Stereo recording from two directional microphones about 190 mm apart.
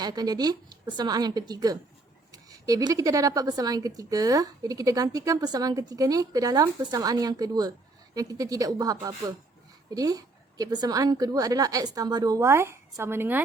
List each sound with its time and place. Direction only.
0.0 s speech: 20° right (ahead or behind)